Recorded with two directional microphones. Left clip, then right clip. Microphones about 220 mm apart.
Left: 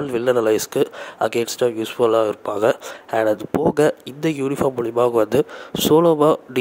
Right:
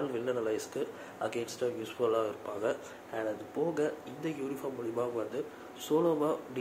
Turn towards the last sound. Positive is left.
turn(degrees=45)  # may be behind; listen again after turning